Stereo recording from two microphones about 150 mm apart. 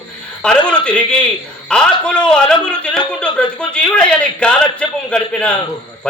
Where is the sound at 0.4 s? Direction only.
5° left (ahead or behind).